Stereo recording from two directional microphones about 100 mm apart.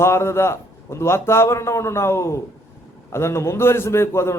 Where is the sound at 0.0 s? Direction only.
25° left (ahead or behind).